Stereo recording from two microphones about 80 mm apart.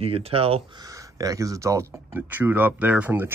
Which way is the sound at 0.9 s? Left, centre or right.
Right.